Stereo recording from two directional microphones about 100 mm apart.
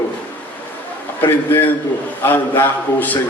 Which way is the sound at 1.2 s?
20° left (ahead or behind).